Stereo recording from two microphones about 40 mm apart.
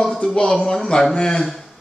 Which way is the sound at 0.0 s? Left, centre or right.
Centre.